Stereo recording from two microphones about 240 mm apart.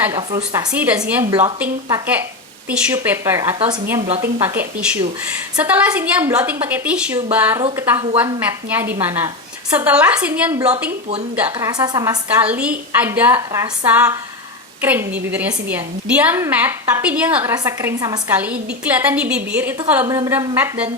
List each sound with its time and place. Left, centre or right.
0.0 s a woman's voice: centre
0.7 s a woman's voice: centre
1.3 s a woman's voice: centre
1.5 s a woman's voice: centre